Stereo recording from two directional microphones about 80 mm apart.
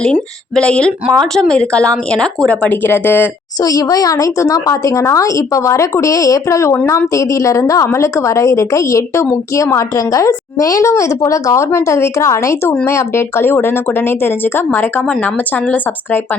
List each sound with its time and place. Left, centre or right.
0.0 s speech: centre
2.5 s speech: left
3.6 s a woman's voice: left